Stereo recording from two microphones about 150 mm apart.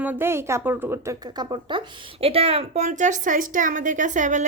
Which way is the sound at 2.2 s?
40° right (ahead or behind).